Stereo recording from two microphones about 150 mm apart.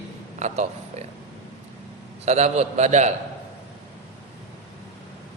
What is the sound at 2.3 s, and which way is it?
Speech, 50° right (ahead or behind).